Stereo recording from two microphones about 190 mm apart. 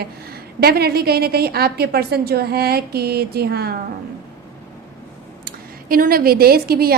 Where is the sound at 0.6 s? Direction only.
55° right (ahead or behind).